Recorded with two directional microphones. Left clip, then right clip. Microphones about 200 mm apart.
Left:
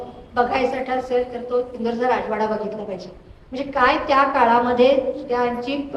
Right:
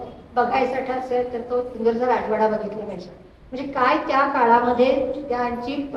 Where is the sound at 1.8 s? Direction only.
40° left (ahead or behind).